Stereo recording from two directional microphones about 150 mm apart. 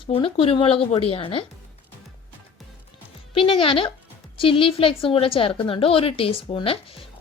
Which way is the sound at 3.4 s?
35° left (ahead or behind).